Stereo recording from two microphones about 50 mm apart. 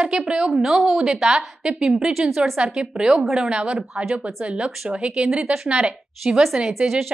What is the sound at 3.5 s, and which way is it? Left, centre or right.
Speech, centre.